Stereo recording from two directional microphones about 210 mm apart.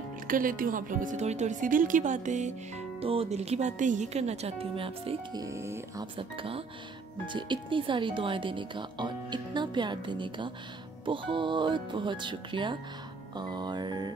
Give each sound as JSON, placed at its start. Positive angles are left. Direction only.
{"t": 0.3, "sound": "speech", "side_deg": -40}
{"t": 6.1, "sound": "speech", "side_deg": -25}